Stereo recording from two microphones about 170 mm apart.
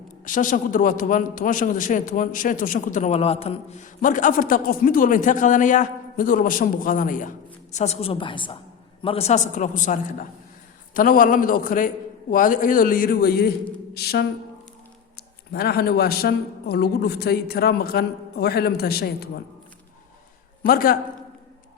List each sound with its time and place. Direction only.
0.3 s a man's voice: 50° left (ahead or behind); by 14.3 s 70° left (ahead or behind)
15.5 s a man's voice: 65° left (ahead or behind)
20.7 s a man's voice: 60° left (ahead or behind)